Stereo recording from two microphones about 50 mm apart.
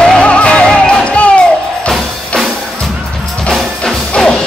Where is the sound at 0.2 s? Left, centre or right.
Left.